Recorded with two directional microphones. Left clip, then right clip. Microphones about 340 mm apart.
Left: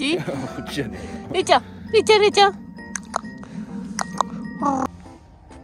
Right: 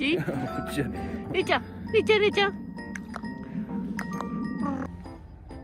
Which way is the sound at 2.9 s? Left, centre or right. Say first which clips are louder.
Left 11 dB; centre.